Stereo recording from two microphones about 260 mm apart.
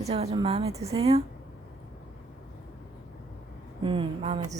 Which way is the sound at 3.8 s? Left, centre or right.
Centre.